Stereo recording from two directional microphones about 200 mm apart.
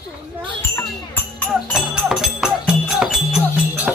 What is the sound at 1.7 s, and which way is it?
Music, centre (ahead or behind).